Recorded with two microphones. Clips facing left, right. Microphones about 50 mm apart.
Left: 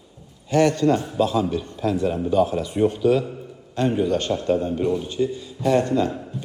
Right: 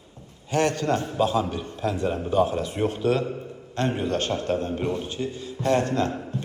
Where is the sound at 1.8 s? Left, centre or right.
Centre.